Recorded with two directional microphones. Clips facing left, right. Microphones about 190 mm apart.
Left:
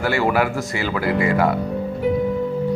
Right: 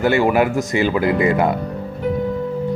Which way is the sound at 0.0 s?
20° right (ahead or behind).